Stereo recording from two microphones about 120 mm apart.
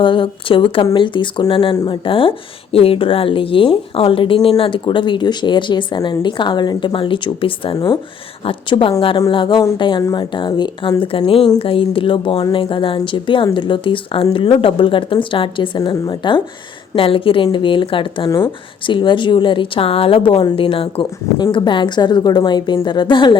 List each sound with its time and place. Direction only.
0.0 s a woman's voice: 45° left (ahead or behind)
18.3 s speech: 30° left (ahead or behind)
18.9 s a woman's voice: 45° left (ahead or behind)